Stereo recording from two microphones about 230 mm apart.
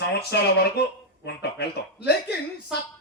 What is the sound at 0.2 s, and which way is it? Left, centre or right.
A man's voice, left.